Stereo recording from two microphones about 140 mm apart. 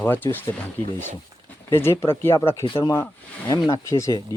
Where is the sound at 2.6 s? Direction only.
35° left (ahead or behind).